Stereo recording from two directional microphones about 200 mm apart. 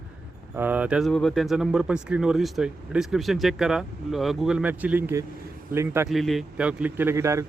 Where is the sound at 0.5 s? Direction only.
10° right (ahead or behind).